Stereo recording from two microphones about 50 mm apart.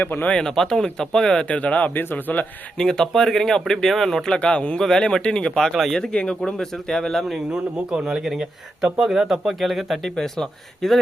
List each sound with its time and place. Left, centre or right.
0.0 s a man's voice: left
0.3 s speech: centre
1.5 s a man's voice: left
2.7 s speech: centre
4.3 s a man's voice: centre
5.5 s speech: centre
6.0 s speech: centre
7.5 s speech: centre
10.2 s speech: centre